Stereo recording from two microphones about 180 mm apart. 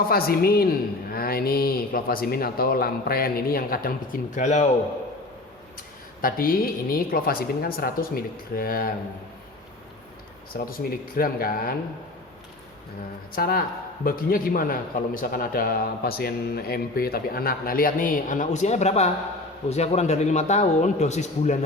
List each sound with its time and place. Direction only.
0.1 s speech: 55° left (ahead or behind); by 4.7 s 40° left (ahead or behind)
6.2 s speech: 55° left (ahead or behind)
10.5 s a man's voice: 55° left (ahead or behind)
13.3 s a man's voice: 55° left (ahead or behind)